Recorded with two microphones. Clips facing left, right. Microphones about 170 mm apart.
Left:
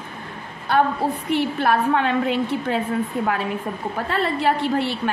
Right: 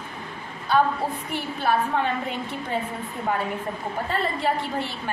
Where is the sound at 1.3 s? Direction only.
70° left (ahead or behind); by 2.8 s 90° left.